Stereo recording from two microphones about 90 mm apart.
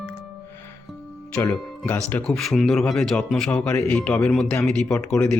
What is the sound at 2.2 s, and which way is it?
Speech, 5° left (ahead or behind).